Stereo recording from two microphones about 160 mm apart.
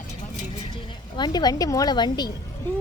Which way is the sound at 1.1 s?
25° left (ahead or behind).